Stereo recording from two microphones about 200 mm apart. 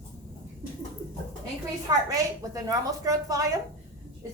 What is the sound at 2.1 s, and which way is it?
Speech, 15° right (ahead or behind).